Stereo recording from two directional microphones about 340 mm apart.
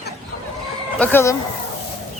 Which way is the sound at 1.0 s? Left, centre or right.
Centre.